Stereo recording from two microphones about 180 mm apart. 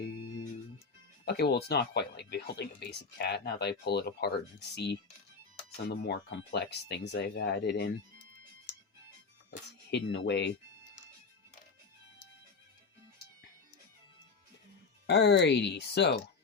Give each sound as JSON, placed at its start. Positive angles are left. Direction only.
{"t": 1.2, "sound": "speech", "side_deg": 65}
{"t": 9.5, "sound": "speech", "side_deg": 75}
{"t": 15.0, "sound": "speech", "side_deg": 70}